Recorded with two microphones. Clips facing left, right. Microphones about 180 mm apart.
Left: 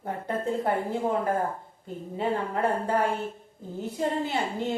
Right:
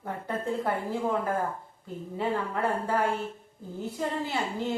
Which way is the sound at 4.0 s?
20° left (ahead or behind).